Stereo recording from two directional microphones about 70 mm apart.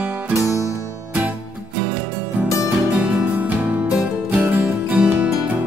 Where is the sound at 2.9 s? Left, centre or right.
Centre.